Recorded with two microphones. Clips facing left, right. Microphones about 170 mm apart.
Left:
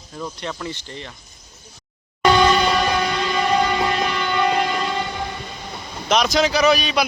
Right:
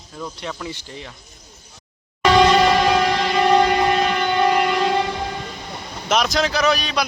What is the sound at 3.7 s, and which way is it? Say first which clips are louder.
Train: right 3 dB; 55° right (ahead or behind).